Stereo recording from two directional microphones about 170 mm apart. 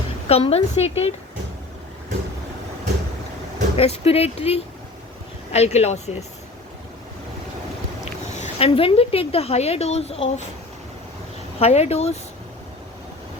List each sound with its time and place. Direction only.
0.3 s a woman's voice: 35° left (ahead or behind)
3.8 s a woman's voice: 35° left (ahead or behind)
8.0 s speech: 40° left (ahead or behind)
11.6 s a woman's voice: 35° left (ahead or behind)